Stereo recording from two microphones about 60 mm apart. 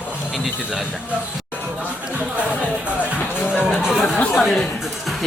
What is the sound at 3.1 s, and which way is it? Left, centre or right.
Music, left.